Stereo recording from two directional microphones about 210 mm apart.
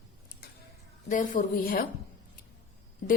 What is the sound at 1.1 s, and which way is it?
Speech, 40° left (ahead or behind).